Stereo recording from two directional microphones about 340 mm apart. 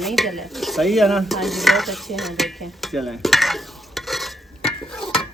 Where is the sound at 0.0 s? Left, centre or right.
Centre.